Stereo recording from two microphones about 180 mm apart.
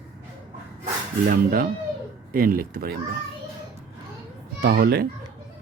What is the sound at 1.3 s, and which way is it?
Speech, 55° right (ahead or behind).